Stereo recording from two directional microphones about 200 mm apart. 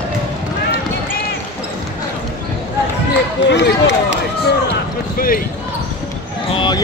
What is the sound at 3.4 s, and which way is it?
Speech, 60° left (ahead or behind).